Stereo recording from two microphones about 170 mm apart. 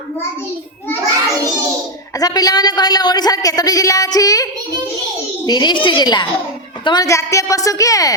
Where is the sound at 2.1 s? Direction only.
20° left (ahead or behind).